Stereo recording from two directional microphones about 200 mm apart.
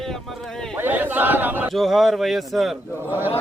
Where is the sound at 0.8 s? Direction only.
10° right (ahead or behind).